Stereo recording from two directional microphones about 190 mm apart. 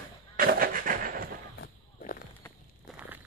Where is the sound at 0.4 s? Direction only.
50° right (ahead or behind).